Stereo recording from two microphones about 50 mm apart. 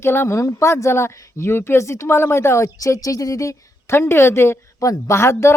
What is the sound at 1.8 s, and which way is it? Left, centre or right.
A woman's voice, left.